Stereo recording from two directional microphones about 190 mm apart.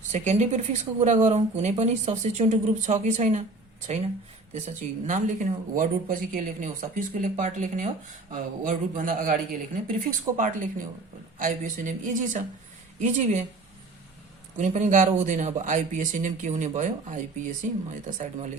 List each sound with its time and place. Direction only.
0.1 s speech: 35° right (ahead or behind)
4.5 s speech: 40° right (ahead or behind)
14.6 s speech: 40° right (ahead or behind)